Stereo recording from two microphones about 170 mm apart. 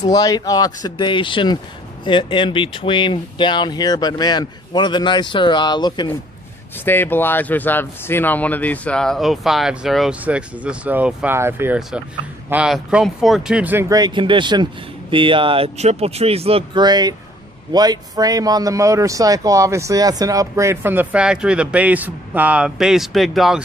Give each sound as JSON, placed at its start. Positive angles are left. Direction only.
{"t": 0.0, "sound": "speech", "side_deg": 20}
{"t": 6.8, "sound": "speech", "side_deg": 10}